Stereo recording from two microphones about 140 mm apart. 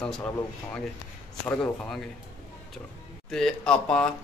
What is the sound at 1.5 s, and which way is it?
Speech, 5° left (ahead or behind).